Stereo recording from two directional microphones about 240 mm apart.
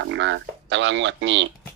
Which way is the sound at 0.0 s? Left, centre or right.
Right.